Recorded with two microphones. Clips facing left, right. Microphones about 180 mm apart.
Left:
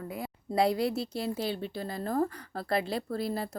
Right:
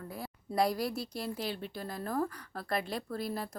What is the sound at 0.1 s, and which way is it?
A woman's voice, 20° left (ahead or behind).